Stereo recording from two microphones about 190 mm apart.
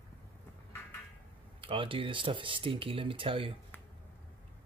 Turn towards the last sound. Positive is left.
turn(degrees=-30)  # may be behind; listen again after turning